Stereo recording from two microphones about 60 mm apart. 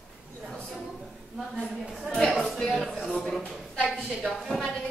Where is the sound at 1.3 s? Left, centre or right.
Centre.